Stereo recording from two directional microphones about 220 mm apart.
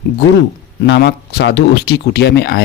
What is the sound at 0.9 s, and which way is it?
Speech, 50° left (ahead or behind).